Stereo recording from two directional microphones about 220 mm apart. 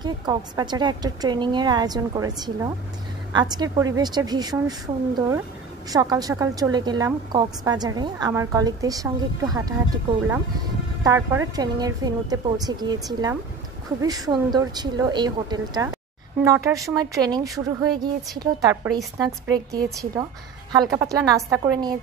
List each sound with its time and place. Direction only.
0.0 s a woman's voice: 20° right (ahead or behind)
11.1 s a woman's voice: 15° right (ahead or behind)